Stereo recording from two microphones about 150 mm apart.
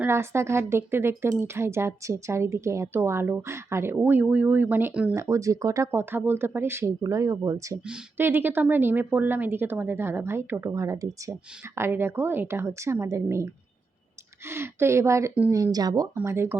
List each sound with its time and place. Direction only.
0.0 s a woman's voice: 15° right (ahead or behind)
7.9 s a woman's voice: 10° right (ahead or behind)